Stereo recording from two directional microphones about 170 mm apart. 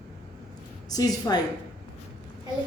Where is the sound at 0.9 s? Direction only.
20° left (ahead or behind).